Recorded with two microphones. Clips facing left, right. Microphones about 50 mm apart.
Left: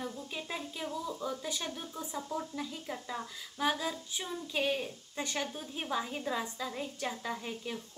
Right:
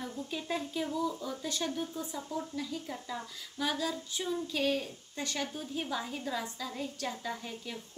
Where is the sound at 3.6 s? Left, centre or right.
Left.